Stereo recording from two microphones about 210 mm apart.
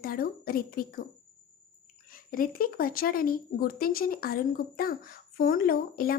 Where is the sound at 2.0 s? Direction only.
40° left (ahead or behind).